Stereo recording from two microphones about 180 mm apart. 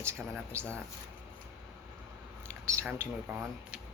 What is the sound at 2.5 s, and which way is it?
Speech, 15° right (ahead or behind).